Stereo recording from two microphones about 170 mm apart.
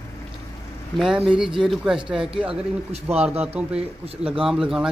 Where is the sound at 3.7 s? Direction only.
35° right (ahead or behind).